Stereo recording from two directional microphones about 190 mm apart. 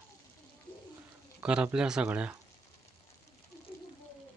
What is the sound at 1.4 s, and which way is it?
Speech, 5° right (ahead or behind).